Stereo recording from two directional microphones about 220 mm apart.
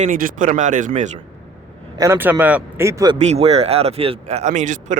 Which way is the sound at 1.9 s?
10° right (ahead or behind).